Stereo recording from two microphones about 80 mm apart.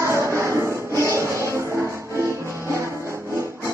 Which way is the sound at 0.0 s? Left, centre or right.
Right.